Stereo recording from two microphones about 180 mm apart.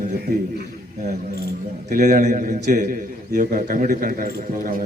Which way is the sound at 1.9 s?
50° right (ahead or behind).